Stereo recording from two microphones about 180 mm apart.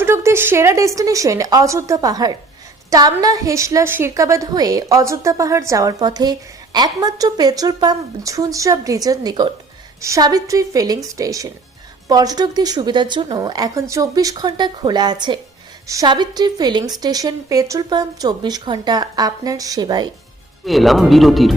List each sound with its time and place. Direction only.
0.0 s a woman's voice: 15° right (ahead or behind)
20.7 s speech: centre (ahead or behind)